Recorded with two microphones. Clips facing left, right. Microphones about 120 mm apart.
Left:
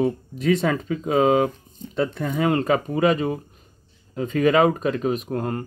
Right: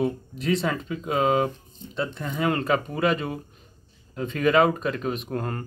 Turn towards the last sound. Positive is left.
turn(degrees=25)  # may be behind; listen again after turning